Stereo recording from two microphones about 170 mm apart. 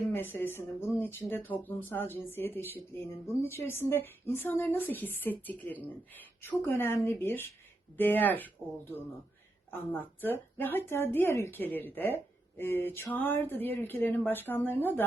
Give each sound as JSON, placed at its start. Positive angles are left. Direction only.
{"t": 0.1, "sound": "speech", "side_deg": 10}